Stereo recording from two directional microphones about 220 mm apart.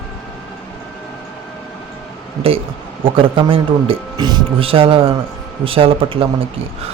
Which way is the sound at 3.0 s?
25° right (ahead or behind).